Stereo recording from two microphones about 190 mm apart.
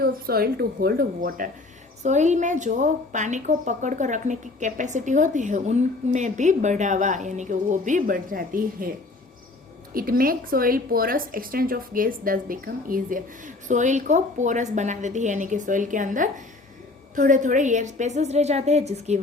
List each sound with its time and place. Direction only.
0.0 s a woman's voice: 55° right (ahead or behind)
9.9 s a woman's voice: 50° right (ahead or behind)